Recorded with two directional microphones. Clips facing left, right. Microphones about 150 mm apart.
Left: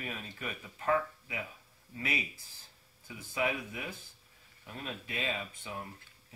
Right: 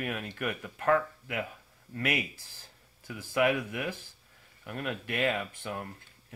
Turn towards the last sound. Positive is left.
turn(degrees=-65)  # may be behind; listen again after turning